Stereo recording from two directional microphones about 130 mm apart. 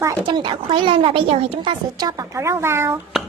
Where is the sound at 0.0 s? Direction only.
25° right (ahead or behind).